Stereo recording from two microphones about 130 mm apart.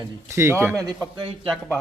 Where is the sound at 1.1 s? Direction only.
40° right (ahead or behind).